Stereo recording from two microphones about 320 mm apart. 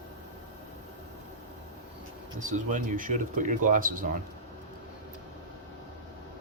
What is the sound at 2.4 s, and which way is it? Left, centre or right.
Speech, right.